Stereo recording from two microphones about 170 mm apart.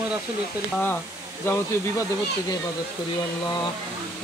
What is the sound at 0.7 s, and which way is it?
Speech, 10° left (ahead or behind).